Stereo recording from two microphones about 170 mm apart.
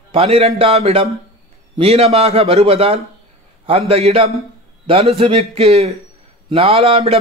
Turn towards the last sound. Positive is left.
turn(degrees=-35)  # may be behind; listen again after turning